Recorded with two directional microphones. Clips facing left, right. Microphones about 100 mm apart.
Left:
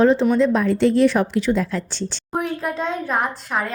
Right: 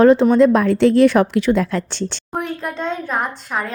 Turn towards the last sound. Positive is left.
turn(degrees=0)  # may be behind; listen again after turning